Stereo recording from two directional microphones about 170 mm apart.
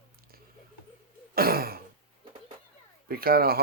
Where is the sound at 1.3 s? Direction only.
60° right (ahead or behind).